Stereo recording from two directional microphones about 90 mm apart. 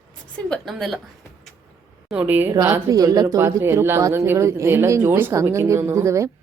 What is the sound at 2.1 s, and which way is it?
Speech, 20° right (ahead or behind).